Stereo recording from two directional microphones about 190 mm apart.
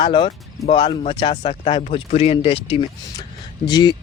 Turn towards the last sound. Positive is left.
turn(degrees=20)  # may be behind; listen again after turning